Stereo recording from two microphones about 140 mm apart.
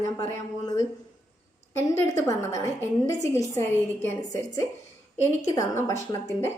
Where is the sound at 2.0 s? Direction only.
20° left (ahead or behind).